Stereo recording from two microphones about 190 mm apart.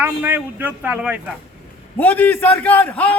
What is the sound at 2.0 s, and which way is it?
A man's voice, 10° left (ahead or behind).